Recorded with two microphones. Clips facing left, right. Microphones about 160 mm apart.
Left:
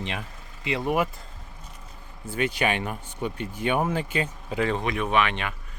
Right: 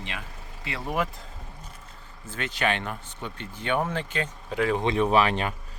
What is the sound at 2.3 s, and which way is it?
Speech, 10° left (ahead or behind).